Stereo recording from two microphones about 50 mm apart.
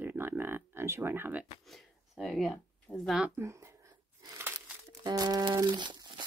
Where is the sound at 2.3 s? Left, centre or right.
Centre.